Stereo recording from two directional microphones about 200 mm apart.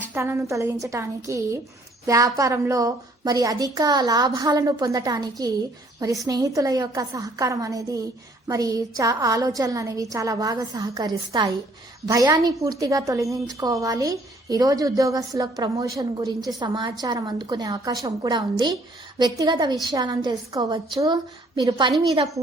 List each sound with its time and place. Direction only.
0.1 s a woman's voice: 15° right (ahead or behind)